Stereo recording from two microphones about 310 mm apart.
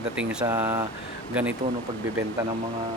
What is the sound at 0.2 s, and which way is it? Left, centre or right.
Speech, centre.